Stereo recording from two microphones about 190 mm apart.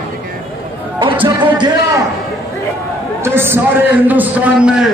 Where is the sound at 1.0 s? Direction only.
25° right (ahead or behind).